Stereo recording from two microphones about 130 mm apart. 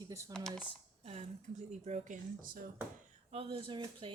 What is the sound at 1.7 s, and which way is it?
Speech, 65° right (ahead or behind).